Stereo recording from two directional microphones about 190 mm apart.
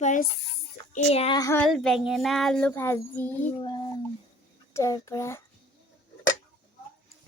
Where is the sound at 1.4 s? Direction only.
15° left (ahead or behind).